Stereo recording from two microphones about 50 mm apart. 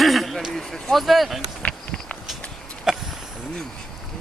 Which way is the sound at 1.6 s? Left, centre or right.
Left.